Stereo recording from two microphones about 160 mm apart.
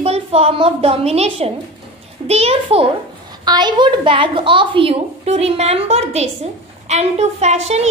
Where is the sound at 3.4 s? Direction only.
25° right (ahead or behind).